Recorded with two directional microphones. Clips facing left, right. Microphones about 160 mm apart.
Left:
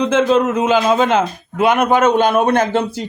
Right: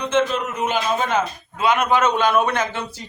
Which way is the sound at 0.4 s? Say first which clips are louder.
Left 8 dB; 90° left.